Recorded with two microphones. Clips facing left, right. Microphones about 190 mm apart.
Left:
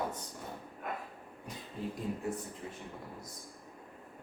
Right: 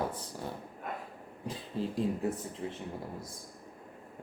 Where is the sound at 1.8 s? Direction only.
90° right.